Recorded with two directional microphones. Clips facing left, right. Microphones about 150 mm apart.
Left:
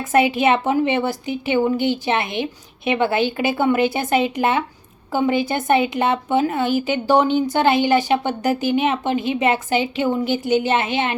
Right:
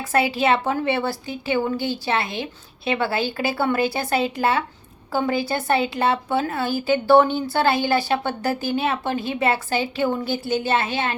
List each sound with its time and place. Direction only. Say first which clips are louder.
0.0 s a woman's voice: left 4 dB; 20° left (ahead or behind)